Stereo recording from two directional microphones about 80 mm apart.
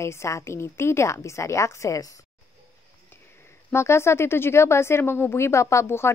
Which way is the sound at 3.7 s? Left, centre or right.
Left.